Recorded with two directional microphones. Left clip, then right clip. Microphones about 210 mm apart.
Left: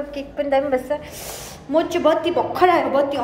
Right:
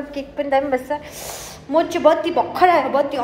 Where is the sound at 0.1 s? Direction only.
5° left (ahead or behind).